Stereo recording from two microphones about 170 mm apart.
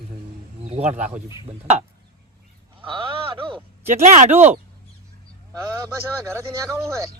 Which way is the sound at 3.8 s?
45° right (ahead or behind).